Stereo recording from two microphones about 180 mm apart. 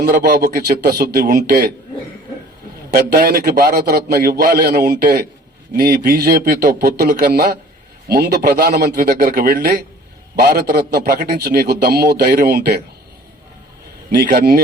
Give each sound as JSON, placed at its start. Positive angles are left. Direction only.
{"t": 0.0, "sound": "a man's voice", "side_deg": -60}
{"t": 2.9, "sound": "a man's voice", "side_deg": -60}
{"t": 14.2, "sound": "a man's voice", "side_deg": -60}